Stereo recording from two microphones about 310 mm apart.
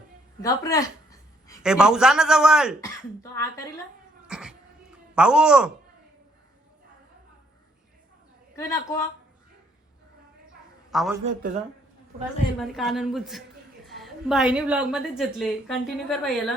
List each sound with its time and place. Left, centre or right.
0.4 s speech: centre
1.6 s a woman's voice: centre
3.3 s speech: centre
4.3 s a sound: centre
8.5 s speech: centre
10.9 s a woman's voice: centre
11.3 s speech: right
12.5 s a woman's voice: centre